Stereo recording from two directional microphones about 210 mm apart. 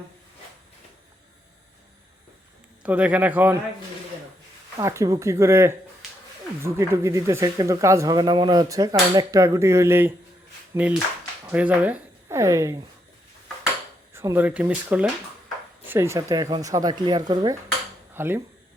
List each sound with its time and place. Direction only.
2.8 s speech: 5° right (ahead or behind)
4.8 s speech: 15° right (ahead or behind)
14.1 s speech: 10° right (ahead or behind)